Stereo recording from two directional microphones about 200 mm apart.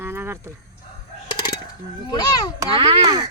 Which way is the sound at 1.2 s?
20° left (ahead or behind).